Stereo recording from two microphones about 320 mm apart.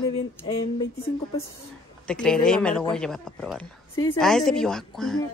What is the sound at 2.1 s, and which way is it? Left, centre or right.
A woman's voice, centre.